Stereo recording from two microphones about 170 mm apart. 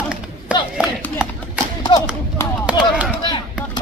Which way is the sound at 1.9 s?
30° left (ahead or behind).